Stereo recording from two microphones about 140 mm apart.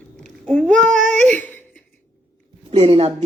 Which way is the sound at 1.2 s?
10° left (ahead or behind).